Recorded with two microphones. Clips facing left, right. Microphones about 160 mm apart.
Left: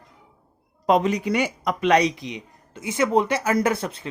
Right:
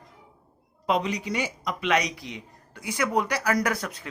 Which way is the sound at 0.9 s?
50° left (ahead or behind).